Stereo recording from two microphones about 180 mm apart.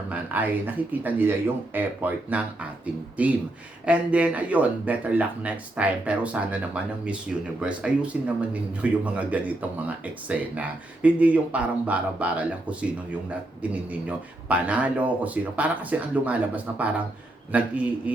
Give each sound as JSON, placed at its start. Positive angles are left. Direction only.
{"t": 0.1, "sound": "speech", "side_deg": -10}
{"t": 1.7, "sound": "speech", "side_deg": -10}
{"t": 14.4, "sound": "speech", "side_deg": -10}